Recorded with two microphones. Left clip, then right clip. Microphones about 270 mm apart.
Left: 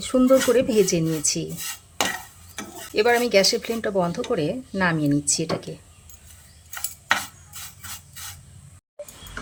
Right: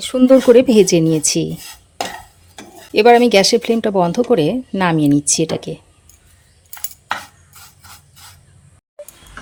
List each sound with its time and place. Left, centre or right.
0.0 s speech: right
2.9 s speech: right